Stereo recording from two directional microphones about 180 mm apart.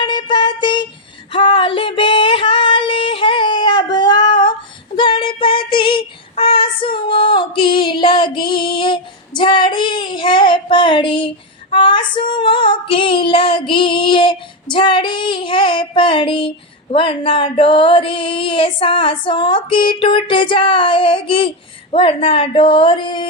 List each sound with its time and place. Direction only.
0.0 s a sound: 25° left (ahead or behind)
1.3 s female singing: 30° left (ahead or behind)
4.9 s child singing: 25° left (ahead or behind)
11.7 s female singing: 25° left (ahead or behind)